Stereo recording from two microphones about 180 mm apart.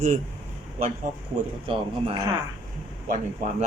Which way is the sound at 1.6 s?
30° right (ahead or behind).